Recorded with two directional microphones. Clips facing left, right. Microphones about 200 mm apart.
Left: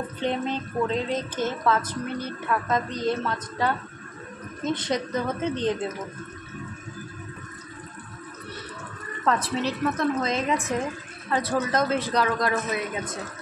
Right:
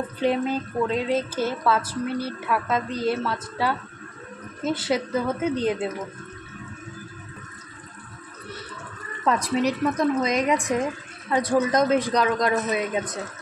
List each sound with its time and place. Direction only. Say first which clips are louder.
0.2 s speech: right 4 dB; 10° right (ahead or behind)
9.2 s speech: right 3 dB; 15° right (ahead or behind)